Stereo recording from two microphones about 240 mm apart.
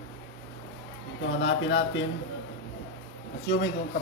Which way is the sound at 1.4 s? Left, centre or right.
Left.